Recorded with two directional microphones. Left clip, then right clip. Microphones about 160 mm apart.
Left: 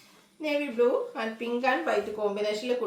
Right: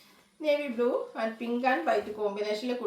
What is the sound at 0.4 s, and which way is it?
Speech, 15° left (ahead or behind).